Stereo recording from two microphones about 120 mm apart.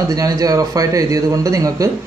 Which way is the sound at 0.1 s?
30° right (ahead or behind).